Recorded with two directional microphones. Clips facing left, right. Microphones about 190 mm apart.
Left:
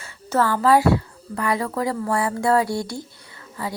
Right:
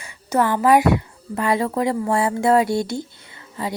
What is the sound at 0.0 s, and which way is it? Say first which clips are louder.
Speech: right 1 dB; 15° right (ahead or behind).